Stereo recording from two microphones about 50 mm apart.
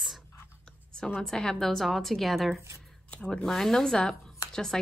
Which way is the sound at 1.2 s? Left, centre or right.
Centre.